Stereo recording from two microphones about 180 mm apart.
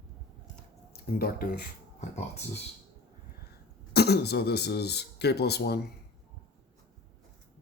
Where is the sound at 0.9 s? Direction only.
55° left (ahead or behind).